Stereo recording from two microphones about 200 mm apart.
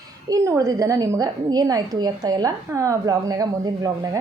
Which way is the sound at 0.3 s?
15° right (ahead or behind).